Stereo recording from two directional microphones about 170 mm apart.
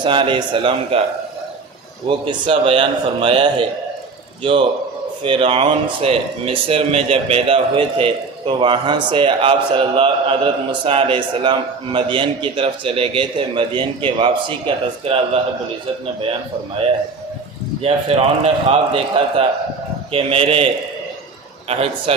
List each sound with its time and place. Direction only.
0.0 s speech: 30° right (ahead or behind)
2.0 s a man's voice: 30° right (ahead or behind)
5.2 s a man's voice: 30° right (ahead or behind)
17.8 s speech: 35° right (ahead or behind)
21.7 s speech: 35° right (ahead or behind)